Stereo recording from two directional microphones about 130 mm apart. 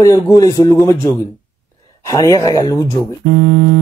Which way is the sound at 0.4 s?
30° left (ahead or behind).